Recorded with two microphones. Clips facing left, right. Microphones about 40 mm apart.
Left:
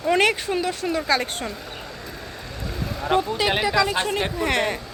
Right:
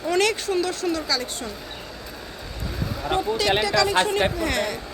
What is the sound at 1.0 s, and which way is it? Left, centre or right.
Speech, left.